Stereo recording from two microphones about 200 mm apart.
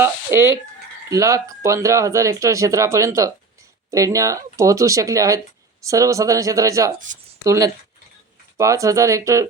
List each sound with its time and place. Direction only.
0.0 s speech: 15° right (ahead or behind)